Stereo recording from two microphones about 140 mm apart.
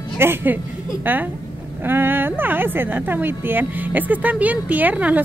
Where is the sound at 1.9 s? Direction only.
15° right (ahead or behind).